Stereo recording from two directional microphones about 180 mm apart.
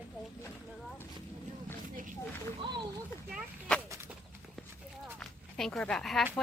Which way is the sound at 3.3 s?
5° left (ahead or behind).